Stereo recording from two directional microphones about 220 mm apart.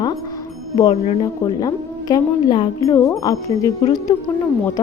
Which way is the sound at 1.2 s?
20° left (ahead or behind).